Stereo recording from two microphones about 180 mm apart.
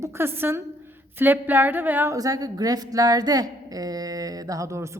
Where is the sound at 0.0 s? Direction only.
15° right (ahead or behind).